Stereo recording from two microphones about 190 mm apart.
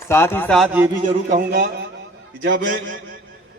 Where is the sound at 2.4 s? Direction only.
80° right.